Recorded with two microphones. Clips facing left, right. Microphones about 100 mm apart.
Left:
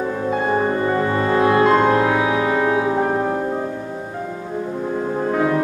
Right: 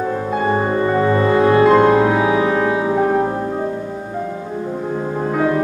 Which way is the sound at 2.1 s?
20° right (ahead or behind).